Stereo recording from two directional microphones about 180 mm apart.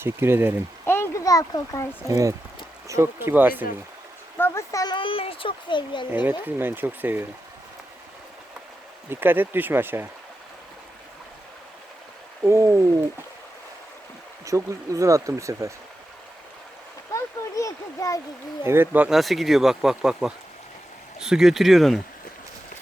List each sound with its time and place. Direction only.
0.0 s speech: 15° right (ahead or behind)
0.9 s a sound: 15° left (ahead or behind)
2.0 s speech: 20° right (ahead or behind)
4.4 s a child's voice: 15° left (ahead or behind)
6.1 s speech: 10° right (ahead or behind)
9.0 s speech: 10° right (ahead or behind)
12.4 s speech: 15° right (ahead or behind)
14.4 s speech: 15° right (ahead or behind)
17.1 s a sound: 15° left (ahead or behind)
18.6 s speech: 15° right (ahead or behind)